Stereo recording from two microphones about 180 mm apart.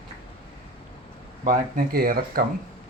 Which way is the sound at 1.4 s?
40° right (ahead or behind).